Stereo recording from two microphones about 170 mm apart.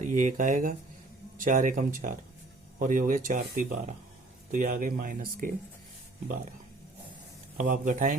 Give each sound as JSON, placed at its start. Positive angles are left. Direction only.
{"t": 0.0, "sound": "speech", "side_deg": -45}
{"t": 7.6, "sound": "speech", "side_deg": -50}